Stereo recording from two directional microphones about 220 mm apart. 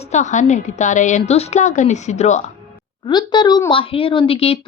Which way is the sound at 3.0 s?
20° left (ahead or behind).